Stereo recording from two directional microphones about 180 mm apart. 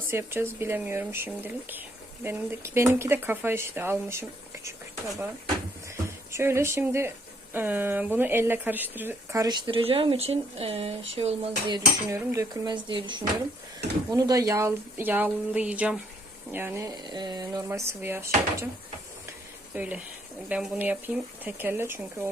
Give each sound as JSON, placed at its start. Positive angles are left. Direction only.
{"t": 0.1, "sound": "speech", "side_deg": -15}
{"t": 6.3, "sound": "speech", "side_deg": -15}
{"t": 12.1, "sound": "speech", "side_deg": -15}
{"t": 19.7, "sound": "speech", "side_deg": -10}